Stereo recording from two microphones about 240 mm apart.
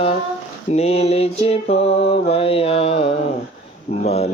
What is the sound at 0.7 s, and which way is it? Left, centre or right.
Mantra, left.